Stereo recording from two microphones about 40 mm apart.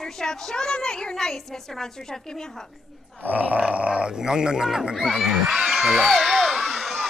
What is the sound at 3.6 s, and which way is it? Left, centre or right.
Speech, right.